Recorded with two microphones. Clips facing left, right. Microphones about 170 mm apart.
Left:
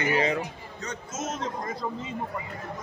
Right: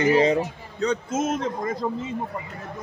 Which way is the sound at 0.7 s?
60° right (ahead or behind).